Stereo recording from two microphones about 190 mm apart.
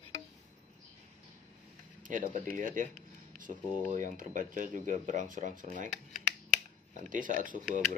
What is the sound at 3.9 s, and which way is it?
Speech, 40° right (ahead or behind).